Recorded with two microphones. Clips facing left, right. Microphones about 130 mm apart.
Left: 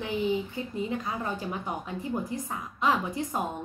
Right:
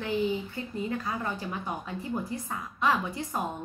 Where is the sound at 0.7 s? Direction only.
20° left (ahead or behind).